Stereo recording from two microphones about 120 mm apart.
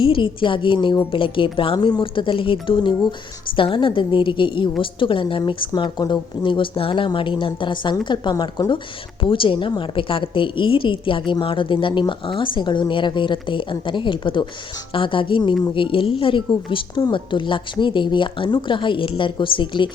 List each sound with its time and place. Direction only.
0.0 s a woman's voice: 45° left (ahead or behind)